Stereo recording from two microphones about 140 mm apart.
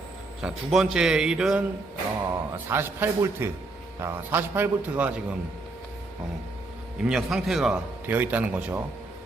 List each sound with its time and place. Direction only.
0.4 s speech: 5° right (ahead or behind)
2.3 s a man's voice: 15° right (ahead or behind)
7.0 s speech: 5° right (ahead or behind)
8.0 s a man's voice: 15° right (ahead or behind)